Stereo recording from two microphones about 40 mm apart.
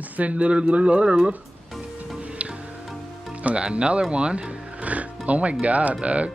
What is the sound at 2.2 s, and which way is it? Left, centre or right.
Music, right.